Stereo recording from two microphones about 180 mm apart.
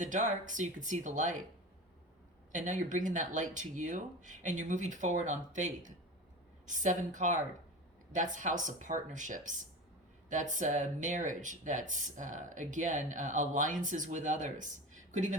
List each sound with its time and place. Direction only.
0.0 s speech: 45° right (ahead or behind)
2.5 s speech: 45° right (ahead or behind)